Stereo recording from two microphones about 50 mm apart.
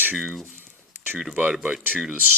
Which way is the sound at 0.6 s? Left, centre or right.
Right.